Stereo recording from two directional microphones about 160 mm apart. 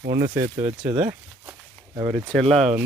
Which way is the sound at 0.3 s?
50° right (ahead or behind).